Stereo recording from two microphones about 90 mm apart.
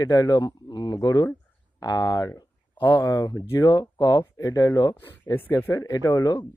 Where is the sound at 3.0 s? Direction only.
40° left (ahead or behind).